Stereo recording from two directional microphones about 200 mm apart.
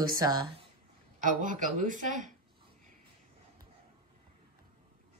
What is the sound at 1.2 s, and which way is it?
Speech, 40° right (ahead or behind).